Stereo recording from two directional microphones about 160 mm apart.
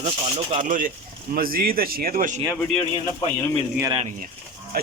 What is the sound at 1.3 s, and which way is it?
Speech, 65° right (ahead or behind).